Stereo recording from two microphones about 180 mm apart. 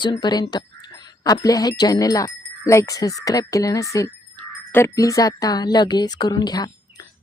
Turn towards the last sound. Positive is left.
turn(degrees=20)  # may be behind; listen again after turning